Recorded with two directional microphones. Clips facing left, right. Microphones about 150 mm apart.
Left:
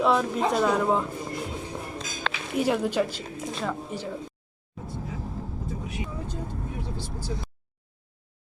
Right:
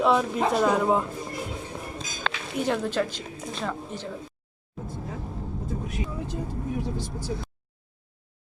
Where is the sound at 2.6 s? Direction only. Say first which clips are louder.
Left 2 dB; 10° left (ahead or behind).